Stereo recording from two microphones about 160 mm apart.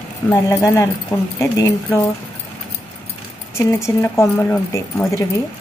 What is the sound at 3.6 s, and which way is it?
Speech, 15° left (ahead or behind).